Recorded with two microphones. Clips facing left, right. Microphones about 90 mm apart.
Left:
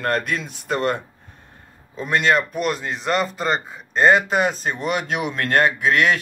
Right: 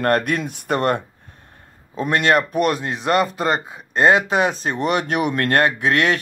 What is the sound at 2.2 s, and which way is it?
Speech, 55° right (ahead or behind).